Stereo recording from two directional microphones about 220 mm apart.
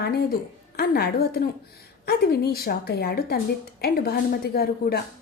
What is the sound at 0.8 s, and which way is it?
A woman's voice, 45° left (ahead or behind).